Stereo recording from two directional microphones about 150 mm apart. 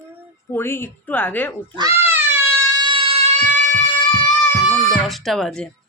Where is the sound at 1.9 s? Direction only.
15° right (ahead or behind).